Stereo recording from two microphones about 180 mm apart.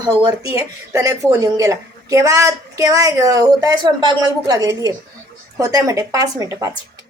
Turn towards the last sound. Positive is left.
turn(degrees=-15)  # may be behind; listen again after turning